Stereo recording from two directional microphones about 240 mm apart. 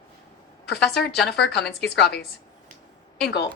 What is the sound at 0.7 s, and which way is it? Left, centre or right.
A woman's voice, left.